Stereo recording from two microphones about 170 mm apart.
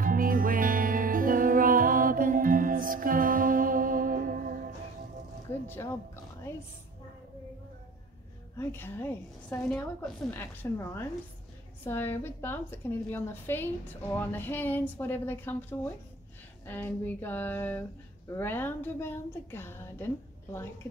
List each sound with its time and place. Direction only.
0.0 s music: 55° right (ahead or behind)
8.5 s a woman's voice: 15° left (ahead or behind)